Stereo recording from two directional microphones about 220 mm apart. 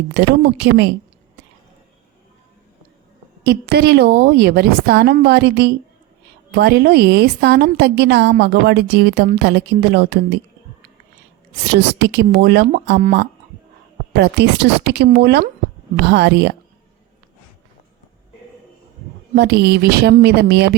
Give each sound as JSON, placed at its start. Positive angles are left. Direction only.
{"t": 0.1, "sound": "a woman's voice", "side_deg": -50}
{"t": 3.4, "sound": "a woman's voice", "side_deg": -45}
{"t": 11.6, "sound": "a woman's voice", "side_deg": -50}
{"t": 19.4, "sound": "a woman's voice", "side_deg": -50}